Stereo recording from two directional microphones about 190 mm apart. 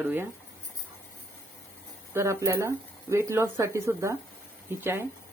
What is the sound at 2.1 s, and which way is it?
Speech, 15° right (ahead or behind).